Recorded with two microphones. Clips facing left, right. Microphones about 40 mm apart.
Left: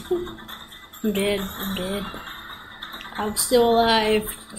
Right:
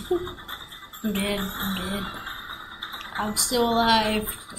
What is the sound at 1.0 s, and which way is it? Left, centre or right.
Speech, left.